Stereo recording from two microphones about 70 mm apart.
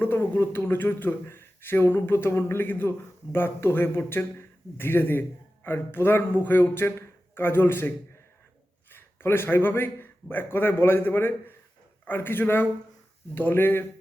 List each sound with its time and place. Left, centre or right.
0.0 s a man's voice: left